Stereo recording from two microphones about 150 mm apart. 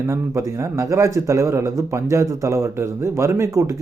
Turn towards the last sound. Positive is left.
turn(degrees=-20)  # may be behind; listen again after turning